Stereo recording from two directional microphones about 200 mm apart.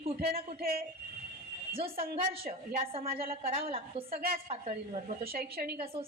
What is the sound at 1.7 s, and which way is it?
Speech, 30° right (ahead or behind).